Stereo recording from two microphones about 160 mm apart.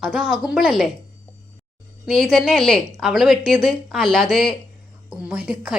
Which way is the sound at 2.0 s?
Centre (ahead or behind).